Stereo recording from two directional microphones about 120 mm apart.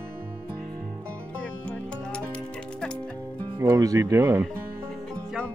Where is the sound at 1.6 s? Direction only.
10° left (ahead or behind).